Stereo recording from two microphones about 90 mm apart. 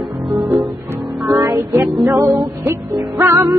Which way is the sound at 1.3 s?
40° right (ahead or behind).